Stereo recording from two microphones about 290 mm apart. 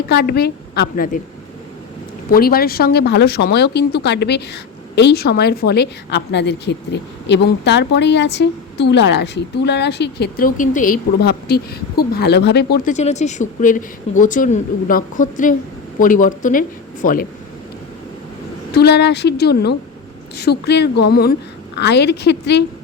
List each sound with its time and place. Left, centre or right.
0.1 s speech: left
2.3 s a woman's voice: left
18.7 s speech: left